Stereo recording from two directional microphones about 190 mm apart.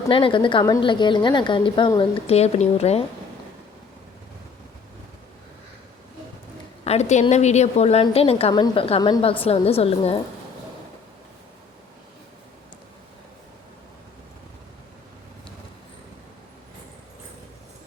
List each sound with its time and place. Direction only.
0.1 s a woman's voice: 25° left (ahead or behind)
6.8 s a woman's voice: 35° left (ahead or behind)